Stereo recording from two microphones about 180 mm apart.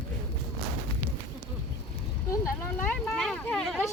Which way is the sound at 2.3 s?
15° left (ahead or behind).